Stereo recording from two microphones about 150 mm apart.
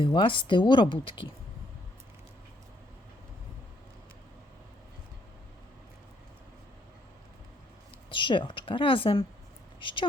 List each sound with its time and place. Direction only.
0.0 s speech: 35° left (ahead or behind)
8.1 s speech: 35° left (ahead or behind)